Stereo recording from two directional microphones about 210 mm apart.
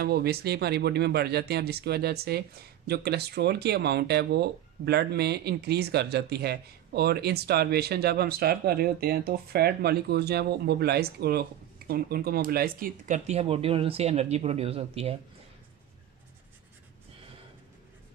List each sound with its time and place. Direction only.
0.0 s speech: 50° right (ahead or behind); by 15.1 s 30° right (ahead or behind)